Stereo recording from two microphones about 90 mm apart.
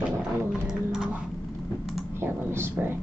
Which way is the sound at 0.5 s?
5° right (ahead or behind).